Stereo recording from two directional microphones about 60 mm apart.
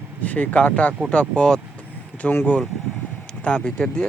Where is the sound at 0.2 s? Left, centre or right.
Left.